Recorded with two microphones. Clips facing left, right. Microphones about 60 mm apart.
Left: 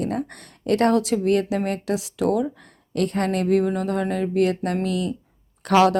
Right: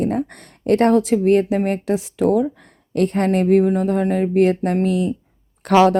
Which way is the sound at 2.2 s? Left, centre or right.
Centre.